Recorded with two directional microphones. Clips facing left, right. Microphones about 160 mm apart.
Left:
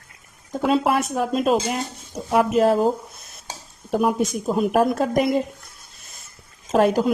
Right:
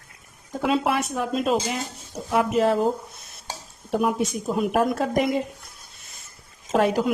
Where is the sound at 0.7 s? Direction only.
45° left (ahead or behind).